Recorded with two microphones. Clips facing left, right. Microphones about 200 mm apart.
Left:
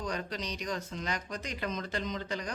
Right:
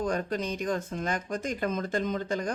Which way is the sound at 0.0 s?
50° right (ahead or behind).